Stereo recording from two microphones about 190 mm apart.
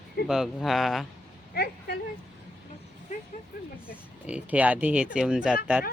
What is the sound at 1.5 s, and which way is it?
Speech, 55° left (ahead or behind).